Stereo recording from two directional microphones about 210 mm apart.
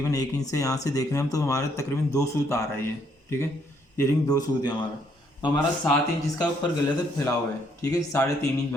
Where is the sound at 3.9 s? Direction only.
15° left (ahead or behind).